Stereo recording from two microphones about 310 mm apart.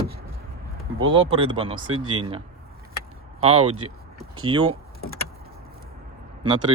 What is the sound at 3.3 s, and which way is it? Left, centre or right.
Speech, centre.